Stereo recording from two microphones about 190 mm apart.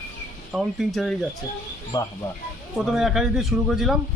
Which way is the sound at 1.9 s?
20° left (ahead or behind).